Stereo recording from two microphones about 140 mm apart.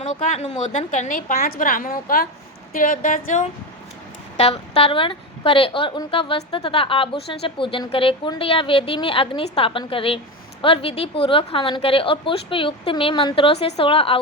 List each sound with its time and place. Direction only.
0.0 s a woman's voice: 55° left (ahead or behind); by 2.2 s 90° left
2.7 s a woman's voice: 75° left (ahead or behind)
4.4 s a woman's voice: 45° left (ahead or behind)